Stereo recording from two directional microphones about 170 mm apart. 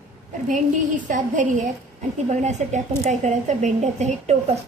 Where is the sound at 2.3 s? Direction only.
40° right (ahead or behind).